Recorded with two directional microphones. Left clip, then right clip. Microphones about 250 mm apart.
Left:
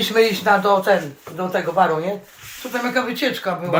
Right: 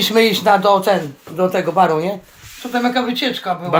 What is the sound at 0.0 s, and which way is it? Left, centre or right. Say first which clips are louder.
Speech: right 3 dB; right.